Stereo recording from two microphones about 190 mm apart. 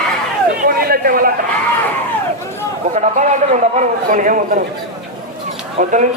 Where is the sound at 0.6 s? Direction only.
50° right (ahead or behind).